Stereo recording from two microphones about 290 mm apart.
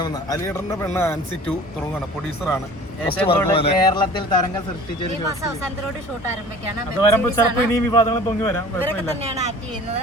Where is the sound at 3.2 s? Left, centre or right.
Centre.